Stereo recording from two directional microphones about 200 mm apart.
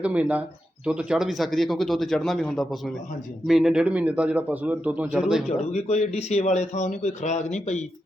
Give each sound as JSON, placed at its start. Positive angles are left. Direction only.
{"t": 0.0, "sound": "a man's voice", "side_deg": -5}
{"t": 5.7, "sound": "a man's voice", "side_deg": 35}